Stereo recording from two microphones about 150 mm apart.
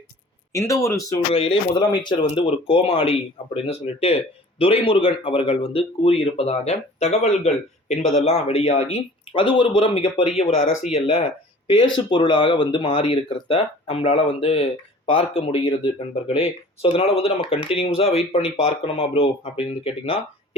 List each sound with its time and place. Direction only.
0.5 s speech: 20° left (ahead or behind)
1.3 s speech: 40° left (ahead or behind)